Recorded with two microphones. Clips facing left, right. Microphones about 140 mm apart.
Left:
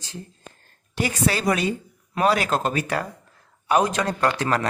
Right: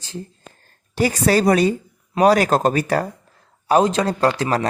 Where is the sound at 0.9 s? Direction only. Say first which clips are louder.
Right 7 dB; 40° right (ahead or behind).